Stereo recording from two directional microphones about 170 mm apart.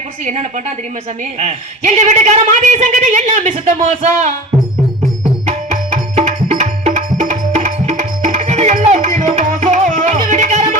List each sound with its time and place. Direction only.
0.3 s a man's voice: 45° right (ahead or behind)
5.5 s music: 45° right (ahead or behind)